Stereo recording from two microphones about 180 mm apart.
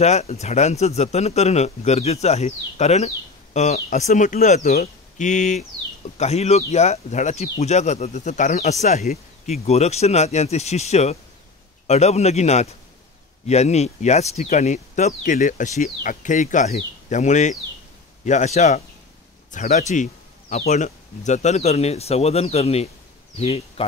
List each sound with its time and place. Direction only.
0.0 s speech: 35° left (ahead or behind)